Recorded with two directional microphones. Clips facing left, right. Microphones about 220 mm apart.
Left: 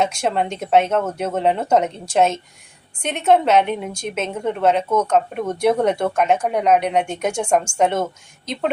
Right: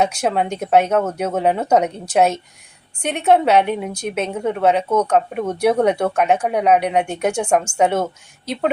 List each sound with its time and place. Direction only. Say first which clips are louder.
0.0 s a woman's voice: right 1 dB; 5° right (ahead or behind)